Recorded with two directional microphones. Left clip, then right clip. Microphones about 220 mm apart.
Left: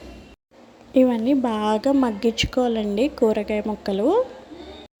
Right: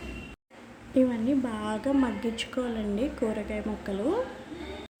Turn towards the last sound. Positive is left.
turn(degrees=35)  # may be behind; listen again after turning